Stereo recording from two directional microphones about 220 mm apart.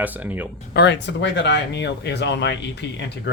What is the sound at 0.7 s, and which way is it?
Speech, 50° left (ahead or behind).